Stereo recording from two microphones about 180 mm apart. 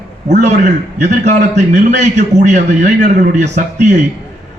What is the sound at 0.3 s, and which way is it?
A man's voice, 40° right (ahead or behind).